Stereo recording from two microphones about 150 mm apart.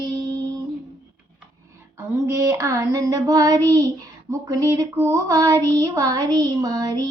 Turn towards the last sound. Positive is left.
turn(degrees=-25)  # may be behind; listen again after turning